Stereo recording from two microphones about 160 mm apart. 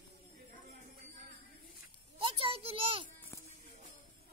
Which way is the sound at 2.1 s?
35° right (ahead or behind).